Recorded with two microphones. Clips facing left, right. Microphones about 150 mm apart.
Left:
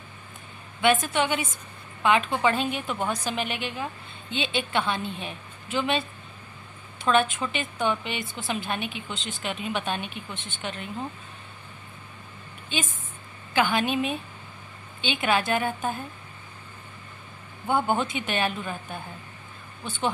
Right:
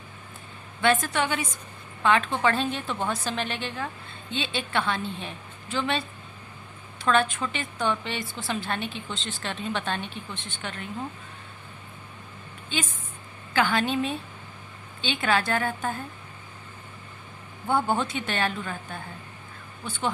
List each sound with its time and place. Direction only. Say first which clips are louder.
1.0 s a woman's voice: left 1 dB; 20° left (ahead or behind)
13.5 s a woman's voice: even; 20° left (ahead or behind)
17.7 s a woman's voice: even; 15° left (ahead or behind)